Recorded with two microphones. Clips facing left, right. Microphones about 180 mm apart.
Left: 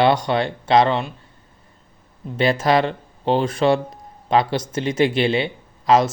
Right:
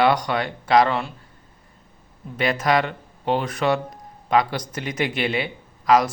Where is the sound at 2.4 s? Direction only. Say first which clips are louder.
Left 3 dB; 30° left (ahead or behind).